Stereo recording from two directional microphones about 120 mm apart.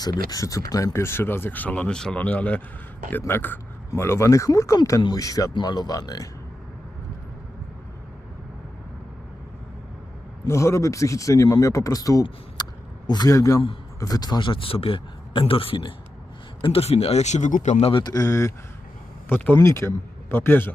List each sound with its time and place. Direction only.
0.0 s speech: 35° left (ahead or behind)
10.4 s speech: 25° left (ahead or behind)
12.6 s a sound: 35° left (ahead or behind)
13.1 s speech: 35° left (ahead or behind); by 17.7 s 90° left
17.7 s speech: 55° left (ahead or behind)
18.0 s speech: 30° left (ahead or behind)